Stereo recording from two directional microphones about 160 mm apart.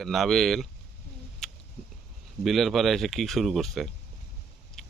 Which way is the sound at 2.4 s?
Centre (ahead or behind).